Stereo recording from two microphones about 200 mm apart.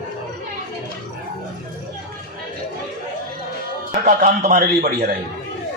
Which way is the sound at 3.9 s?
40° right (ahead or behind).